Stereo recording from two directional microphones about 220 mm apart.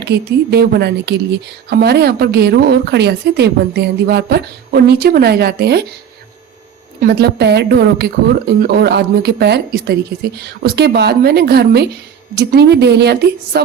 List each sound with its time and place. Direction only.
0.0 s a woman's voice: 45° right (ahead or behind)
7.0 s a woman's voice: 45° right (ahead or behind)